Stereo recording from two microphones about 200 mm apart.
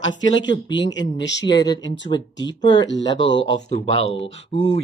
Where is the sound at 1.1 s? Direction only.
65° left (ahead or behind).